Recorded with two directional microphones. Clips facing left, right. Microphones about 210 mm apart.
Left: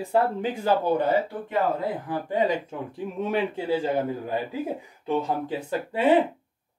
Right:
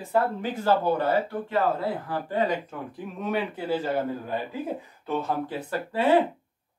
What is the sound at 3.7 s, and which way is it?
Speech, 15° left (ahead or behind).